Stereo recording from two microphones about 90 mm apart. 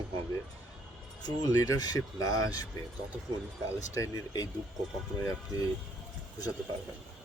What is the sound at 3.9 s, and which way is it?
Speech, 40° left (ahead or behind).